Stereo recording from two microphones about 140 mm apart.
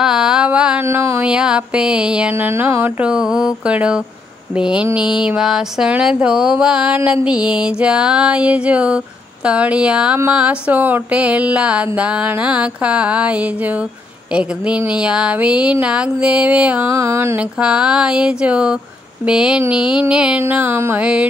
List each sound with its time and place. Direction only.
0.0 s mantra: 5° right (ahead or behind)
0.8 s music: 20° right (ahead or behind)
16.9 s a sound: 20° right (ahead or behind)
17.4 s music: 10° right (ahead or behind)